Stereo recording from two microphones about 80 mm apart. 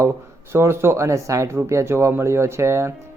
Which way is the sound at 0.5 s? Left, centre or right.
Right.